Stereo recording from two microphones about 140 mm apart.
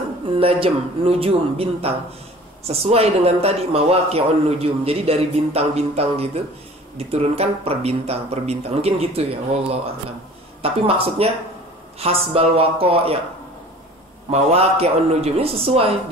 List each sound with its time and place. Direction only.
0.4 s a man's voice: 45° right (ahead or behind)
14.3 s a man's voice: 45° right (ahead or behind)